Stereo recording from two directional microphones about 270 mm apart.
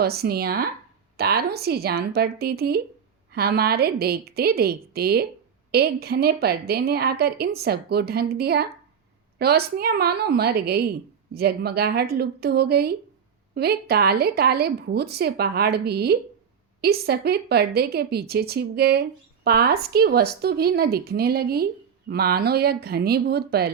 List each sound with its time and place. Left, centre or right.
0.0 s a woman's voice: right